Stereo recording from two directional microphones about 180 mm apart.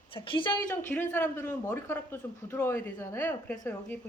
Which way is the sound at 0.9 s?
10° left (ahead or behind).